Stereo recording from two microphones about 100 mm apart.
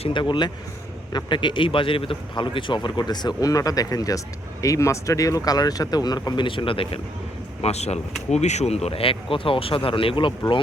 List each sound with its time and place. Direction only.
0.1 s a man's voice: 50° left (ahead or behind)
7.6 s speech: 90° left; by 10.3 s 60° left (ahead or behind)